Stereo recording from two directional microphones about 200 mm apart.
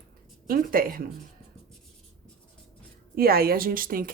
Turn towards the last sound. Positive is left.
turn(degrees=-45)  # may be behind; listen again after turning